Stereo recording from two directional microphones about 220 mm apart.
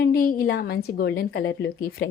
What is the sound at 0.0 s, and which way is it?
A woman's voice, 40° left (ahead or behind).